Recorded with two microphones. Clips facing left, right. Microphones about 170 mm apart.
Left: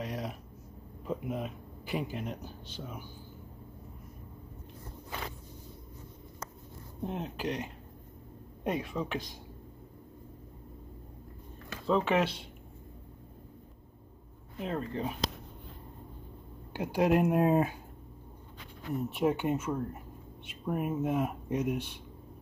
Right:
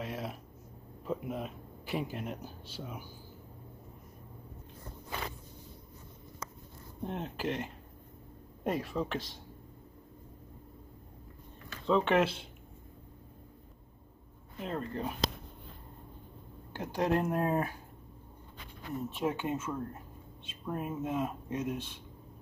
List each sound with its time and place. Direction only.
0.0 s a sound: centre (ahead or behind)
1.0 s speech: centre (ahead or behind)
7.0 s speech: centre (ahead or behind)
11.8 s speech: 5° left (ahead or behind)
14.6 s speech: 5° left (ahead or behind)
16.7 s speech: 10° left (ahead or behind)
19.1 s speech: 15° left (ahead or behind)